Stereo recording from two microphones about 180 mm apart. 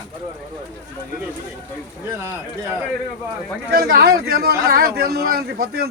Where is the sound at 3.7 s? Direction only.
55° right (ahead or behind).